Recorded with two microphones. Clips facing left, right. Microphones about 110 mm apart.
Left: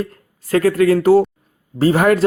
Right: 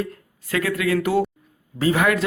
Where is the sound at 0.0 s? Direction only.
40° left (ahead or behind).